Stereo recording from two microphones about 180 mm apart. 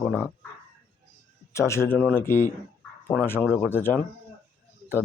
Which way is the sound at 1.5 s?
15° left (ahead or behind).